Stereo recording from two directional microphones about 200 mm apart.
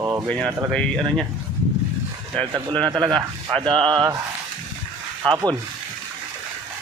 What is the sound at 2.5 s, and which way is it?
Speech, 20° right (ahead or behind).